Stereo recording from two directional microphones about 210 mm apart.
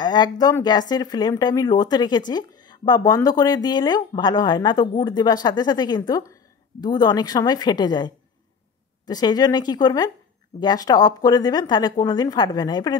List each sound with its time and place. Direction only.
0.0 s speech: 20° left (ahead or behind)